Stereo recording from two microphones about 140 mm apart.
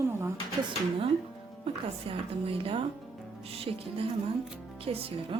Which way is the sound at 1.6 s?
45° right (ahead or behind).